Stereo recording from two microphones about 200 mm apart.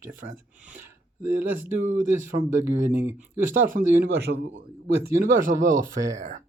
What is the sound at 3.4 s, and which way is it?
Speech, 40° right (ahead or behind).